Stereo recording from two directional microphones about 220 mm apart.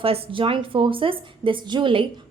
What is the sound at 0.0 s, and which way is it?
A woman's voice, 25° right (ahead or behind).